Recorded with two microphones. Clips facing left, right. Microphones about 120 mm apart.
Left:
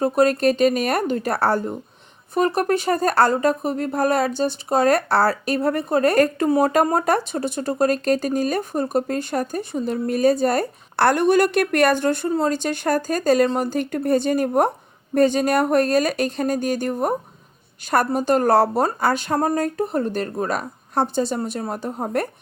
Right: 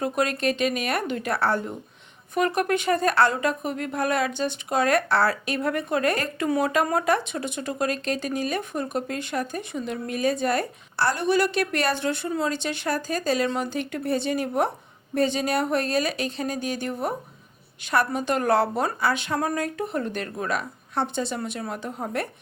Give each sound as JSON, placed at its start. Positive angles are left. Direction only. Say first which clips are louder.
{"t": 0.0, "sound": "speech", "louder": "left 7 dB", "side_deg": 35}
{"t": 10.9, "sound": "a woman's voice", "louder": "left 6 dB", "side_deg": 55}